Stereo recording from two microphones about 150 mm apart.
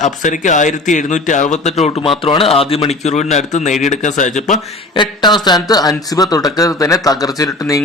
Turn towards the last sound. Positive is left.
turn(degrees=25)  # may be behind; listen again after turning